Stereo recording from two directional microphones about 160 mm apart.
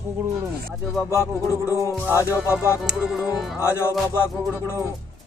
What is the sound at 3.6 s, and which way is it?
Music, 15° left (ahead or behind).